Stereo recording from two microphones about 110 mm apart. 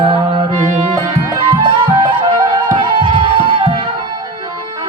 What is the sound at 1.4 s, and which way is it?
Music, 50° right (ahead or behind).